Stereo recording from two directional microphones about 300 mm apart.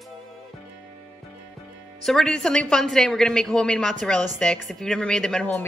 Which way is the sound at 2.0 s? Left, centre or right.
Centre.